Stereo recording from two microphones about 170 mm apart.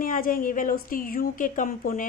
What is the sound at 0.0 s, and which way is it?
A woman's voice, 55° left (ahead or behind).